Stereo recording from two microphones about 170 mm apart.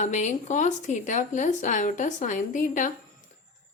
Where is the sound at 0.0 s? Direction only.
45° left (ahead or behind).